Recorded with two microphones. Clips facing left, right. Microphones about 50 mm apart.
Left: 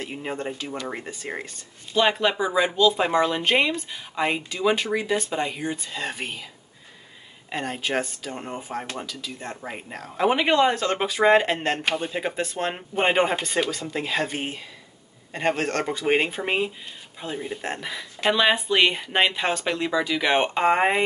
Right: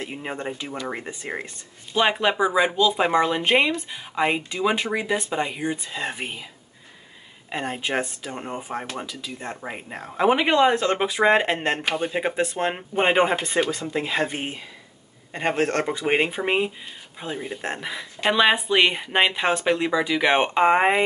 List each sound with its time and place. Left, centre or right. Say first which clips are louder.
0.0 s speech: even; centre
7.4 s speech: right 1 dB; centre
10.7 s speech: right 2 dB; centre
12.7 s speech: right 1 dB; centre
13.9 s speech: right 1 dB; centre